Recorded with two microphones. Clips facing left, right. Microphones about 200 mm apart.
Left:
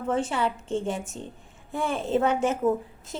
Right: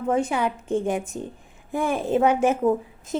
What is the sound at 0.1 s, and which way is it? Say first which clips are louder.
A woman's voice: right 3 dB; 15° right (ahead or behind).